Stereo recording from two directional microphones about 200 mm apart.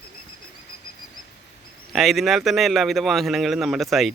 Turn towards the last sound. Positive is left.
turn(degrees=0)  # may be behind; listen again after turning